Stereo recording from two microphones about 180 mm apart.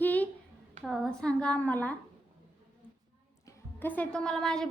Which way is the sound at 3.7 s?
10° left (ahead or behind).